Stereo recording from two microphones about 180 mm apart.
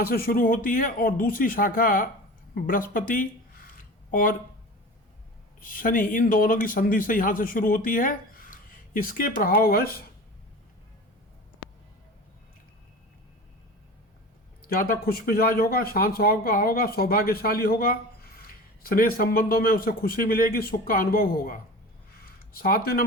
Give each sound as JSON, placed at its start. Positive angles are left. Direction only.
{"t": 0.0, "sound": "a man's voice", "side_deg": 55}
{"t": 2.6, "sound": "a sound", "side_deg": 50}
{"t": 5.5, "sound": "a man's voice", "side_deg": 50}
{"t": 14.7, "sound": "speech", "side_deg": 55}